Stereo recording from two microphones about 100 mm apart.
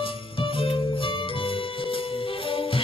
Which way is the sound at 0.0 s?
65° left (ahead or behind).